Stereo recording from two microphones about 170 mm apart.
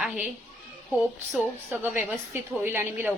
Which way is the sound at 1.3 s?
10° right (ahead or behind).